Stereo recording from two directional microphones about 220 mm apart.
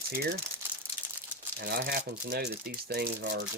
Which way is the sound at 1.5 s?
45° right (ahead or behind).